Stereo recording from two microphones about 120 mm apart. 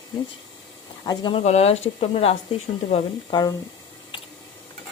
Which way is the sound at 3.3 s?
35° left (ahead or behind).